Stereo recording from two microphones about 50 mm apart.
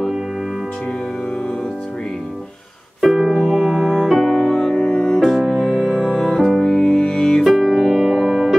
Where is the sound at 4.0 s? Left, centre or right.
Centre.